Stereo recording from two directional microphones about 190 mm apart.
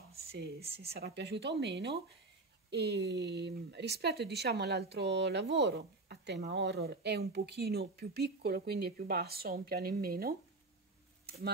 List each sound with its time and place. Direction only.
0.7 s speech: 60° right (ahead or behind)